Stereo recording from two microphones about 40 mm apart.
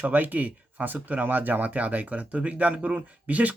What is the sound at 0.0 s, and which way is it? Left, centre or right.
Speech, right.